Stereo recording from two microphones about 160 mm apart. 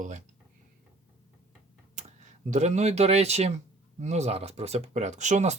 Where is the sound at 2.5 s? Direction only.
45° right (ahead or behind).